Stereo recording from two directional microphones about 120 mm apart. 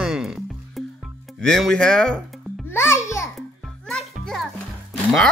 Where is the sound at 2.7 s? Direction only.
20° left (ahead or behind).